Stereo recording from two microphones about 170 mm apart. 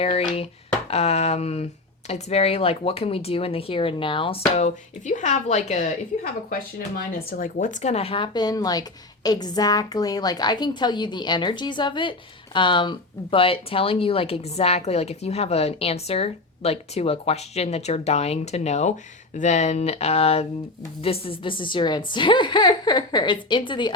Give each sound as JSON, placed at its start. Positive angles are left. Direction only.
{"t": 0.9, "sound": "speech", "side_deg": 40}
{"t": 6.5, "sound": "a woman's voice", "side_deg": 60}